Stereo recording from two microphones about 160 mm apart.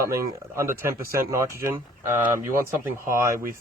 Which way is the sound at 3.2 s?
15° right (ahead or behind).